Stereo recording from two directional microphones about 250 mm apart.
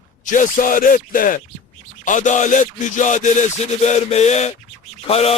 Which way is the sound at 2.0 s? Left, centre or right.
Left.